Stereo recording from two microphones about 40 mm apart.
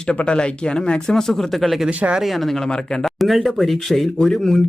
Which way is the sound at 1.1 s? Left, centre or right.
Centre.